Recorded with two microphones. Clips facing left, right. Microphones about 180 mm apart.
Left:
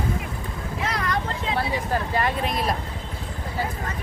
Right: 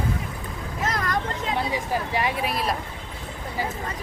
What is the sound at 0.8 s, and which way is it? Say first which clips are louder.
Vehicle: right 1 dB; 45° right (ahead or behind).